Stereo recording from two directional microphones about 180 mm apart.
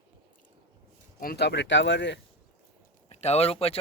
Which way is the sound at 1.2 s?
60° left (ahead or behind).